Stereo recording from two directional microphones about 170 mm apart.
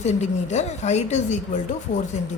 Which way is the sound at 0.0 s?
45° left (ahead or behind).